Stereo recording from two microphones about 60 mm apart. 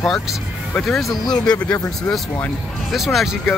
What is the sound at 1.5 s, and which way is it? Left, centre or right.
Speech, left.